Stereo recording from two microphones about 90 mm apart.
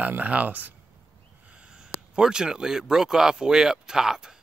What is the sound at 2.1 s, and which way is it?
Speech, 10° right (ahead or behind).